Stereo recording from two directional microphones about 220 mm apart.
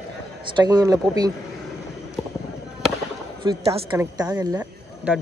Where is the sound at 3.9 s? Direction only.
15° right (ahead or behind).